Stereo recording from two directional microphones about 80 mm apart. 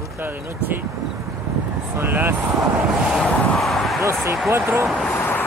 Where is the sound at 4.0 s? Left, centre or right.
Right.